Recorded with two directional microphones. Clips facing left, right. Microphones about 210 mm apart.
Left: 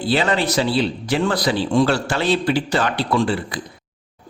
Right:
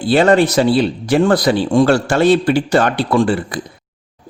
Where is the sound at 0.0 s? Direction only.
50° right (ahead or behind).